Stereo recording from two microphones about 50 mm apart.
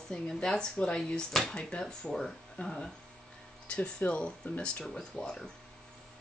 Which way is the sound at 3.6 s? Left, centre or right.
Left.